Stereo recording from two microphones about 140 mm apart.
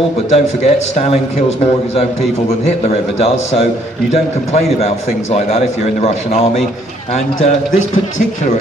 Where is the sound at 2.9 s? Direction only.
45° left (ahead or behind).